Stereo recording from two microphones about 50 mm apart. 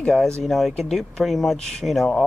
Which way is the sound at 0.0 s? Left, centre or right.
Centre.